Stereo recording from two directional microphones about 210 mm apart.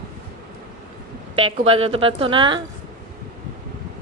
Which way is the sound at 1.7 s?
25° right (ahead or behind).